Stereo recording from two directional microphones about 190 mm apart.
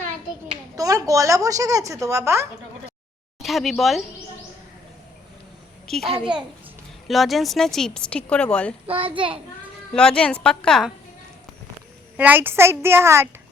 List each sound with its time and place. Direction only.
0.8 s a woman's voice: 20° right (ahead or behind)
3.4 s speech: centre (ahead or behind)
5.9 s speech: centre (ahead or behind)
8.9 s a child's voice: 30° right (ahead or behind)
9.9 s speech: 5° left (ahead or behind)
12.1 s a woman's voice: 10° right (ahead or behind)